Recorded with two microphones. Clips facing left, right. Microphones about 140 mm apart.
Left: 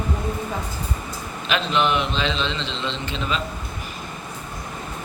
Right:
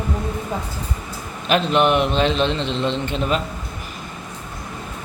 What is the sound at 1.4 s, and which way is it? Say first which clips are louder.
A man's voice: right 5 dB; 50° right (ahead or behind).